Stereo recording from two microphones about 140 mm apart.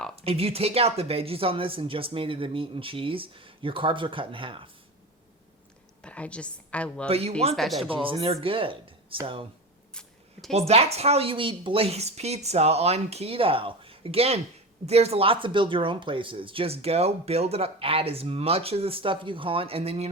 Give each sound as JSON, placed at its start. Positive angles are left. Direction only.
{"t": 0.3, "sound": "speech", "side_deg": -45}
{"t": 6.0, "sound": "a woman's voice", "side_deg": 10}
{"t": 7.1, "sound": "speech", "side_deg": -45}
{"t": 7.5, "sound": "speech", "side_deg": 0}
{"t": 8.0, "sound": "speech", "side_deg": -40}
{"t": 9.9, "sound": "camera", "side_deg": 5}
{"t": 10.5, "sound": "speech", "side_deg": -50}